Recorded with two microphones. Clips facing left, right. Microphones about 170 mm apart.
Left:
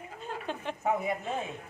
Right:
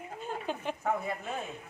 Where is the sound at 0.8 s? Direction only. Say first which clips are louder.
Left 3 dB; 10° left (ahead or behind).